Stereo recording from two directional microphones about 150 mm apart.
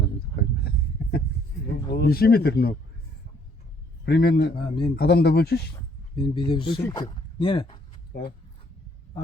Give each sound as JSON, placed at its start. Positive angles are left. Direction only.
{"t": 1.9, "sound": "speech", "side_deg": 90}
{"t": 4.0, "sound": "speech", "side_deg": 90}
{"t": 4.5, "sound": "speech", "side_deg": 30}
{"t": 4.9, "sound": "speech", "side_deg": 90}
{"t": 6.1, "sound": "speech", "side_deg": 35}